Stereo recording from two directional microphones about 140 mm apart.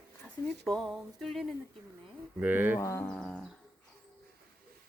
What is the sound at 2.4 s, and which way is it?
Speech, 10° right (ahead or behind).